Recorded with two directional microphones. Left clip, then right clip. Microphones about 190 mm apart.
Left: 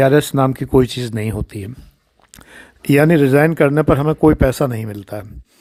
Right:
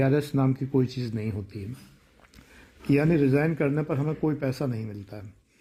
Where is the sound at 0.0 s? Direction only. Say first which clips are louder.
Left 12 dB; 35° left (ahead or behind).